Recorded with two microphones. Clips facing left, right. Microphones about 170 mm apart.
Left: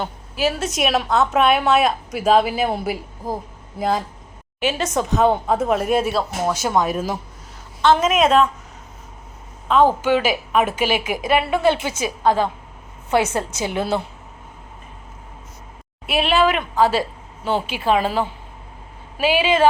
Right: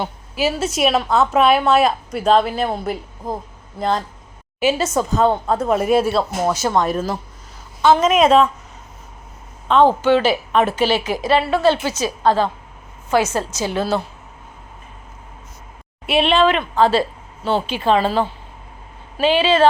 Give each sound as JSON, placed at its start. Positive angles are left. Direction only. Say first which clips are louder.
{"t": 0.0, "sound": "a woman's voice", "louder": "right 1 dB", "side_deg": -5}
{"t": 9.6, "sound": "a woman's voice", "louder": "right 2 dB", "side_deg": 5}
{"t": 16.0, "sound": "a woman's voice", "louder": "right 2 dB", "side_deg": 0}